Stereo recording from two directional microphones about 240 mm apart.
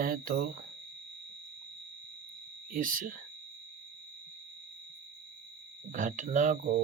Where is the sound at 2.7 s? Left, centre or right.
Right.